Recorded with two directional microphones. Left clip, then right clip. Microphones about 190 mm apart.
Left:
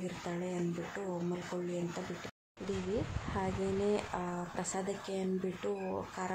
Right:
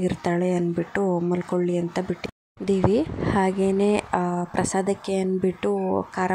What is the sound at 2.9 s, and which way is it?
Speech, 50° right (ahead or behind).